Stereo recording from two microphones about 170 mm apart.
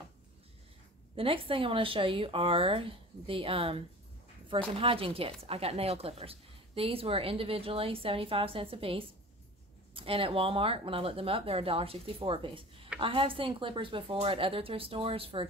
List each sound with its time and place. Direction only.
1.1 s speech: 30° right (ahead or behind)